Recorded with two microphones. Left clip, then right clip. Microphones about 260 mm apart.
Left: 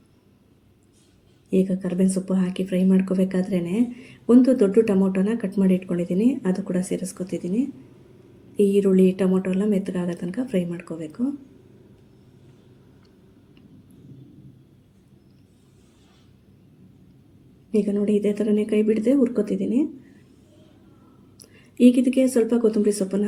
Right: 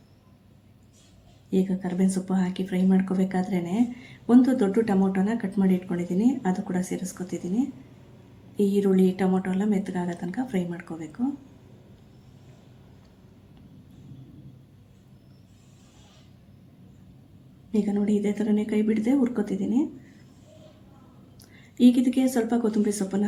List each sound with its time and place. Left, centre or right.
1.5 s speech: centre
8.5 s speech: centre
17.7 s speech: centre
21.8 s speech: centre